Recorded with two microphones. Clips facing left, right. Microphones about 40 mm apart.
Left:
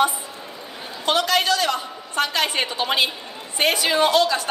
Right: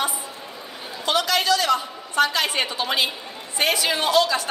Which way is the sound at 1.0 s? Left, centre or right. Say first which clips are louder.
Left 1 dB; left.